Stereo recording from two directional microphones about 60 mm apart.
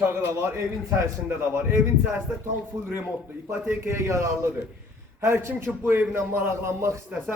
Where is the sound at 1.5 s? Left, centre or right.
Right.